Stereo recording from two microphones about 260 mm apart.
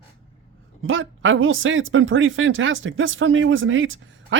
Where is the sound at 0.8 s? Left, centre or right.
Right.